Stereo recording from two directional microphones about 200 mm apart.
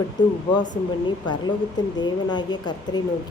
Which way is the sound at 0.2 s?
20° left (ahead or behind).